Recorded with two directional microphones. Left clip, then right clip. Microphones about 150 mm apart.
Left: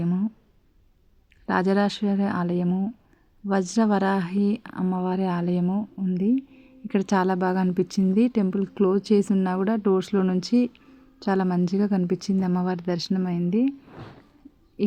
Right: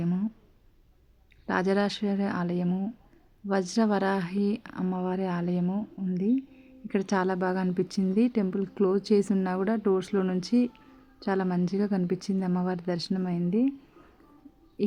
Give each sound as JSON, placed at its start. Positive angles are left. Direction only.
{"t": 0.0, "sound": "a sound", "side_deg": 40}
{"t": 1.5, "sound": "speech", "side_deg": 45}
{"t": 14.8, "sound": "owl", "side_deg": 40}